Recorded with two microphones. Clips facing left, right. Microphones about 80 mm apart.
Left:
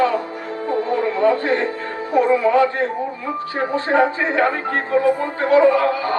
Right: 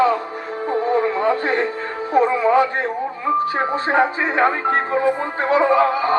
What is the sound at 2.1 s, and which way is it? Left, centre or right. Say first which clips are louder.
Speech: even; right.